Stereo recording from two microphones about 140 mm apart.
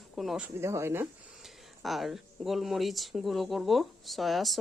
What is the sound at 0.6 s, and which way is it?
Speech, 20° right (ahead or behind).